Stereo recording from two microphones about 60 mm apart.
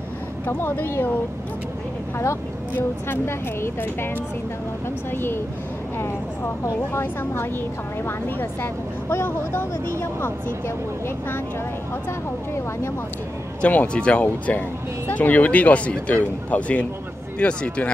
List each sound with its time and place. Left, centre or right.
0.5 s speech: left
2.7 s speech: left
5.1 s speech: left
6.9 s speech: left
9.1 s speech: left
13.6 s speech: left